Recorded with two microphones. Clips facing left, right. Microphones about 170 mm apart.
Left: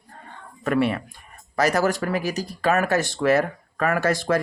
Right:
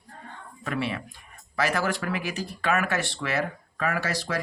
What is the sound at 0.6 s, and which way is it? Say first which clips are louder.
Speech: left 8 dB; 50° left (ahead or behind).